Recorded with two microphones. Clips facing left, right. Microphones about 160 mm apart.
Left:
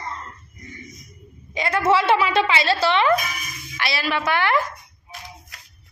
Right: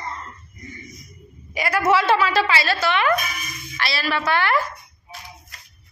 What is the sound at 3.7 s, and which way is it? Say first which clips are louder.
Speech: even; 15° left (ahead or behind).